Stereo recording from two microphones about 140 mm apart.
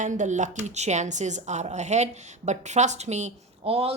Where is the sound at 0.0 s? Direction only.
60° right (ahead or behind).